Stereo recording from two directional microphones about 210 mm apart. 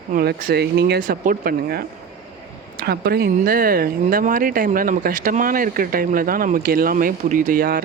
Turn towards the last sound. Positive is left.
turn(degrees=-45)  # may be behind; listen again after turning